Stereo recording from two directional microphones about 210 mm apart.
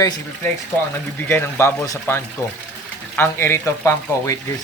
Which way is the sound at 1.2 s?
10° left (ahead or behind).